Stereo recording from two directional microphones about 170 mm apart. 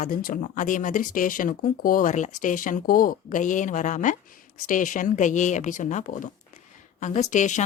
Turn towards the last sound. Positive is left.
turn(degrees=45)  # may be behind; listen again after turning